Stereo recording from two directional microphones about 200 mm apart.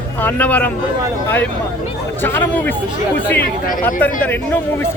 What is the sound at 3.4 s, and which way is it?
Speech, 45° left (ahead or behind).